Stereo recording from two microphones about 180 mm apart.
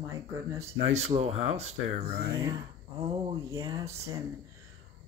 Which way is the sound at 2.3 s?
20° right (ahead or behind).